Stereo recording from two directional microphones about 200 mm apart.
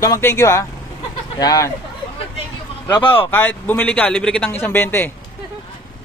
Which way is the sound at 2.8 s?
20° left (ahead or behind).